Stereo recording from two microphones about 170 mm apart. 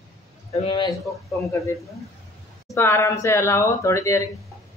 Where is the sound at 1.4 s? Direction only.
15° left (ahead or behind).